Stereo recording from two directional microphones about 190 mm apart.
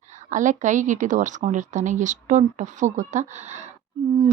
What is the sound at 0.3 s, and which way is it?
Speech, 40° right (ahead or behind).